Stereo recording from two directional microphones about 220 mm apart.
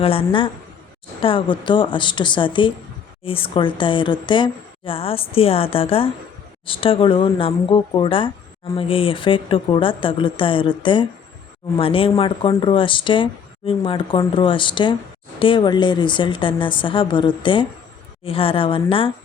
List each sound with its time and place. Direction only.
0.0 s speech: 25° left (ahead or behind)